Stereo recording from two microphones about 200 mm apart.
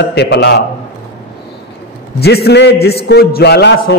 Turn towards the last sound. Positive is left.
turn(degrees=60)  # may be behind; listen again after turning